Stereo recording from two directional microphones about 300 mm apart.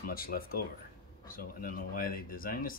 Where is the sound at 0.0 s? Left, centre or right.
Left.